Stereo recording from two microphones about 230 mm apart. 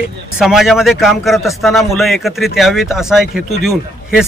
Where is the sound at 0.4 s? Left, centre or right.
Centre.